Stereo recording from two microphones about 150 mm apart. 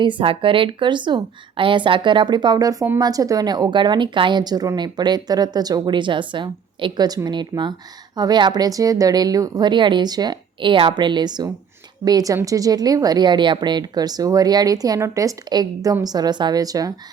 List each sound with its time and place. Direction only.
0.0 s a woman's voice: 35° right (ahead or behind)